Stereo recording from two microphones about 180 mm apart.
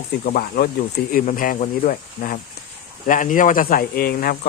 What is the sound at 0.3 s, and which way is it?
Speech, 55° left (ahead or behind).